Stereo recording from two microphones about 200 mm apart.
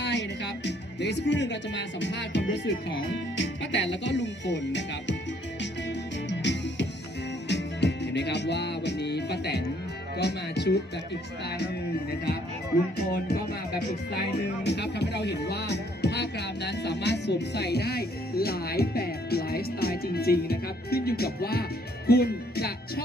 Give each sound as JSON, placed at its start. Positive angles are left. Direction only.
{"t": 0.0, "sound": "speech", "side_deg": 60}
{"t": 6.4, "sound": "music", "side_deg": 60}
{"t": 10.2, "sound": "speech", "side_deg": 55}
{"t": 14.6, "sound": "speech", "side_deg": 55}